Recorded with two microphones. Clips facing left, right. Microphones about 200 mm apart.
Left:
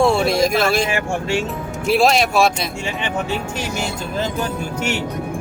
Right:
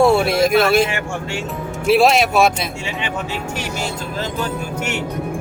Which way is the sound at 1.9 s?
5° right (ahead or behind).